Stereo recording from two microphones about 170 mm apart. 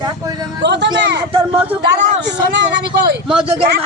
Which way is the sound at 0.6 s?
90° right.